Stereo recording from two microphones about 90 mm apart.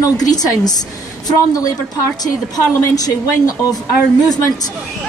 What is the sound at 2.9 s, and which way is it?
Speech, 45° left (ahead or behind).